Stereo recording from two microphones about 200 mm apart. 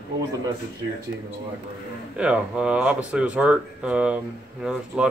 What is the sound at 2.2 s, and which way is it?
Speech, 5° right (ahead or behind).